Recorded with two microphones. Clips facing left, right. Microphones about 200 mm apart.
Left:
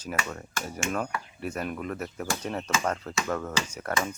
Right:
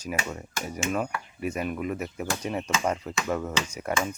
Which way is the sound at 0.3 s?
10° right (ahead or behind).